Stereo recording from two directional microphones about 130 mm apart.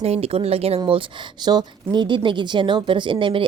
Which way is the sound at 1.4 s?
35° right (ahead or behind).